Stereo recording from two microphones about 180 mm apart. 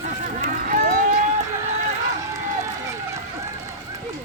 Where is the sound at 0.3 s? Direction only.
50° right (ahead or behind).